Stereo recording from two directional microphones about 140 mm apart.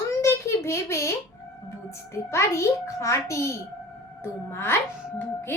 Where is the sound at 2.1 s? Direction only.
20° left (ahead or behind).